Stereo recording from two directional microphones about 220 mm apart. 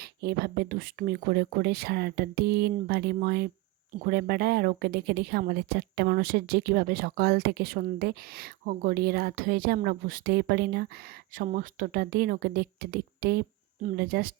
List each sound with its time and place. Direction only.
0.0 s speech: 45° right (ahead or behind)